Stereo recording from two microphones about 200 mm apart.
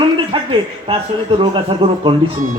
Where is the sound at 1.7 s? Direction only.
25° right (ahead or behind).